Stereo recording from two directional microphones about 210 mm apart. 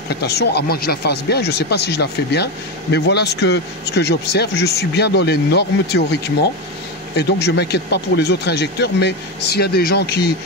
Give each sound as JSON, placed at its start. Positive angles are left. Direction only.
{"t": 0.1, "sound": "speech", "side_deg": 50}